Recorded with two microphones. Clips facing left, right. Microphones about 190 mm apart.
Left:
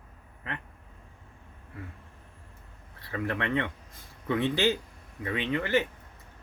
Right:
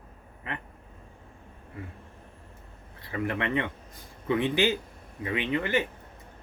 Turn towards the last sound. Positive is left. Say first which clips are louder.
# even
turn(degrees=-20)  # may be behind; listen again after turning